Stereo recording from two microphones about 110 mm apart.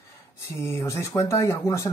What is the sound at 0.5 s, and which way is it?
Speech, 25° left (ahead or behind).